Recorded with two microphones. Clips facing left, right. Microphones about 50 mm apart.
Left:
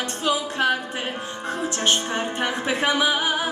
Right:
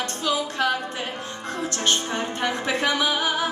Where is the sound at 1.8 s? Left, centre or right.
Left.